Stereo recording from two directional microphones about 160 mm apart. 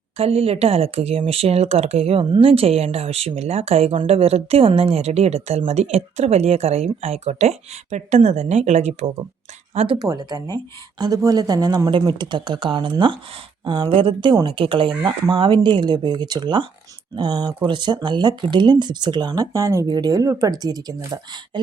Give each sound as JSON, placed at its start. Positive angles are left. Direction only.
{"t": 0.2, "sound": "speech", "side_deg": -40}